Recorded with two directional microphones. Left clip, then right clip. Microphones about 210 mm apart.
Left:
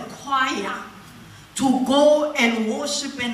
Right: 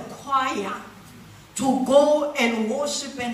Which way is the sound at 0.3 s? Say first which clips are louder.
Left 1 dB; 45° right (ahead or behind).